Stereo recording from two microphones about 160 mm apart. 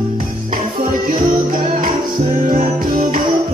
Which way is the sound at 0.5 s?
60° right (ahead or behind).